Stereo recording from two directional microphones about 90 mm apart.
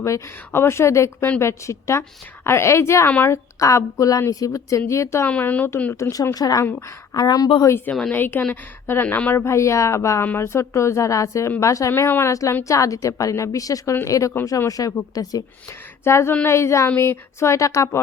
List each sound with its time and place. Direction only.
0.0 s a woman's voice: 30° left (ahead or behind)
5.2 s a woman's voice: 20° left (ahead or behind); by 7.5 s 45° left (ahead or behind)
8.1 s a woman's voice: 20° left (ahead or behind)
9.4 s a woman's voice: 30° left (ahead or behind)
16.0 s a woman's voice: 30° left (ahead or behind)